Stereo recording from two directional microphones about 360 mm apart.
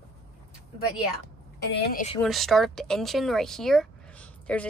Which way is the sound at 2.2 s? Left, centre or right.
Centre.